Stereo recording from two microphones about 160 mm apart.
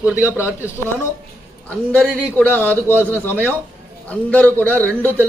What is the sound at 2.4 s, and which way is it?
Speech, 10° left (ahead or behind).